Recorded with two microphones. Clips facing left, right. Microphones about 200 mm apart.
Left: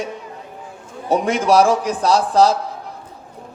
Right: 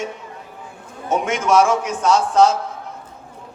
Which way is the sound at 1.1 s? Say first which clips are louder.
Left 2 dB; 35° left (ahead or behind).